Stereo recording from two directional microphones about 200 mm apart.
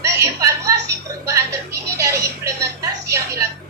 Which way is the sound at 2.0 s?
15° right (ahead or behind).